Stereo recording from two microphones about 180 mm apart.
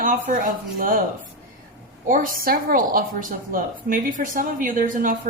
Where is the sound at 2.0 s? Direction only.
50° right (ahead or behind).